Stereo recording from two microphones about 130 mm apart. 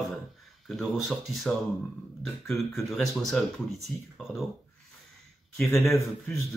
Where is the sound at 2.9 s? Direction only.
Centre (ahead or behind).